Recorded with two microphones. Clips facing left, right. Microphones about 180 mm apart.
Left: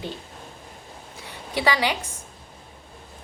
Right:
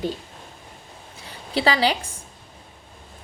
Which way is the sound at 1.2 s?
30° right (ahead or behind).